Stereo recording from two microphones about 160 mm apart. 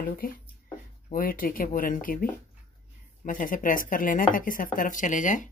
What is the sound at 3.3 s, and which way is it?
Speech, 60° left (ahead or behind).